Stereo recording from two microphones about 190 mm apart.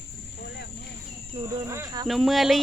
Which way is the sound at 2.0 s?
Centre (ahead or behind).